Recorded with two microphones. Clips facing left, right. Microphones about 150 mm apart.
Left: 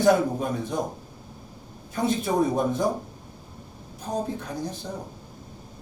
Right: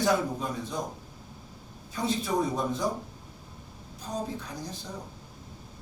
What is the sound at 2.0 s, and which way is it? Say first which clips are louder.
Speech: left 5 dB; 55° left (ahead or behind).